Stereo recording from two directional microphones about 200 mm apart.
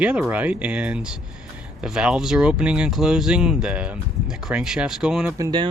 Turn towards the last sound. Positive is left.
turn(degrees=-20)  # may be behind; listen again after turning